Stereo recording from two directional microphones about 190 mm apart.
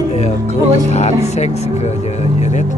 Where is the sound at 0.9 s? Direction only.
35° left (ahead or behind).